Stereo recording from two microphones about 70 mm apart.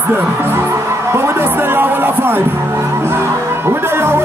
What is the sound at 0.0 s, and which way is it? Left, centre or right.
Speech, right.